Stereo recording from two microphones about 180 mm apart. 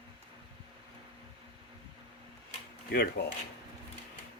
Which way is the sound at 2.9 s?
65° left (ahead or behind).